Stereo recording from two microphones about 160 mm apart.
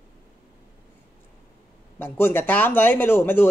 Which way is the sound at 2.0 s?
10° left (ahead or behind).